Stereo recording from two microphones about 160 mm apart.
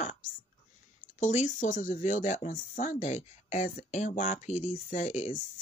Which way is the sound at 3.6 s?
55° left (ahead or behind).